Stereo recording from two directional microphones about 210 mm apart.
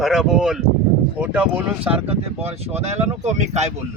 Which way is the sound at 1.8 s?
30° right (ahead or behind).